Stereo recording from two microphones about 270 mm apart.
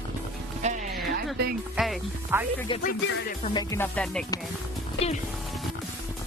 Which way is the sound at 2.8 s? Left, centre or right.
Left.